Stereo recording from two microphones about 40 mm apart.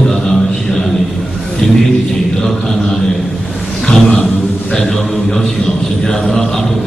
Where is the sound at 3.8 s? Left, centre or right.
Centre.